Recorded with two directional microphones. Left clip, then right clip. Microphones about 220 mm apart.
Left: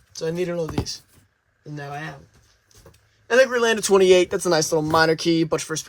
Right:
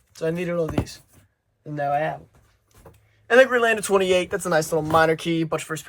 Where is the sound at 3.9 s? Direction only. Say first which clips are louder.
Left 6 dB; 50° left (ahead or behind).